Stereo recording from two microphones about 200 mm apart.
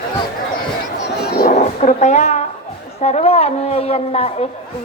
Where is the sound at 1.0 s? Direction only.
55° left (ahead or behind).